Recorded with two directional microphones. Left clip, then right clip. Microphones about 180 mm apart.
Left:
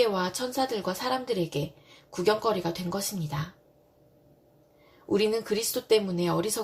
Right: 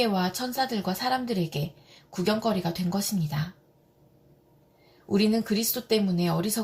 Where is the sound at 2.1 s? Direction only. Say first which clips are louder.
Left 2 dB; 35° left (ahead or behind).